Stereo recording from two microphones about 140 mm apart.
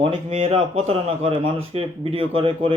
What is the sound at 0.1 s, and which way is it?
Speech, 50° right (ahead or behind).